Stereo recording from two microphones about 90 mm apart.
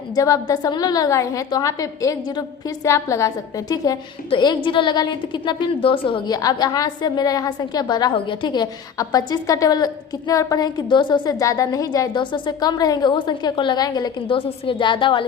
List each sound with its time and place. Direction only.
0.2 s a woman's voice: 40° left (ahead or behind)
4.3 s a woman's voice: 60° left (ahead or behind)
6.2 s a woman's voice: 45° left (ahead or behind)
8.1 s a woman's voice: 65° left (ahead or behind); by 14.1 s 45° left (ahead or behind)
14.3 s a woman's voice: 85° left; by 15.2 s 70° left (ahead or behind)